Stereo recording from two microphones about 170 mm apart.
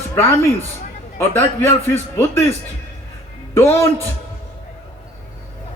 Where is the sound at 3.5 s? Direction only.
15° left (ahead or behind).